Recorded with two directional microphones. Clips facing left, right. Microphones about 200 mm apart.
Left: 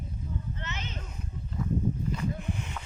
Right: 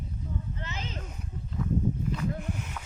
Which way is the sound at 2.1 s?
5° right (ahead or behind).